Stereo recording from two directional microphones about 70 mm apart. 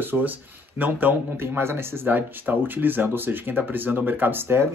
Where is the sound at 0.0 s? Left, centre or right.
Right.